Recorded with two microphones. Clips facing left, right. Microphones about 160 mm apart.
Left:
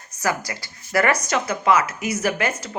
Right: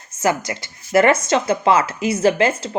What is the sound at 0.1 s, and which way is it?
Speech, 25° right (ahead or behind).